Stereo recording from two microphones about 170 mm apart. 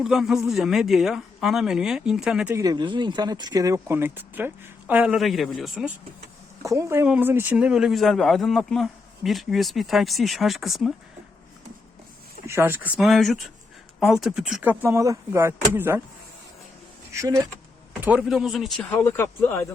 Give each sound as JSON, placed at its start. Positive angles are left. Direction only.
{"t": 0.0, "sound": "speech", "side_deg": 0}
{"t": 2.6, "sound": "speech", "side_deg": -25}
{"t": 6.7, "sound": "speech", "side_deg": -15}
{"t": 12.5, "sound": "speech", "side_deg": -15}
{"t": 13.0, "sound": "speech", "side_deg": 0}
{"t": 17.2, "sound": "speech", "side_deg": -20}
{"t": 18.0, "sound": "speech", "side_deg": -5}